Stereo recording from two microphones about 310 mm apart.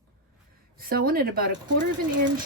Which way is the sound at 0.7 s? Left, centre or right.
Right.